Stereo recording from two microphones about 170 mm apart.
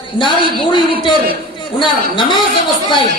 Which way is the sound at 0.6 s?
25° left (ahead or behind).